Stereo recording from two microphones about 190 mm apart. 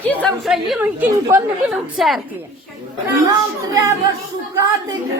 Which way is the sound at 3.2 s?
15° right (ahead or behind).